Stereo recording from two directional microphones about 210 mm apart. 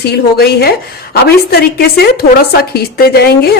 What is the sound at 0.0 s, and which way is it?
A woman's voice, 50° left (ahead or behind).